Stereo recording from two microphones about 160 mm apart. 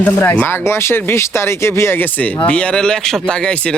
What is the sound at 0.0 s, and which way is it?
Speech, 10° left (ahead or behind).